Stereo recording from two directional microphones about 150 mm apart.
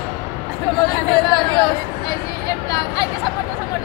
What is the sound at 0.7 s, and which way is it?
Chatter, 30° left (ahead or behind).